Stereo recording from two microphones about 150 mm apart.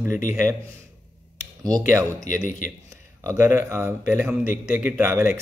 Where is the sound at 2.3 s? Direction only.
60° left (ahead or behind).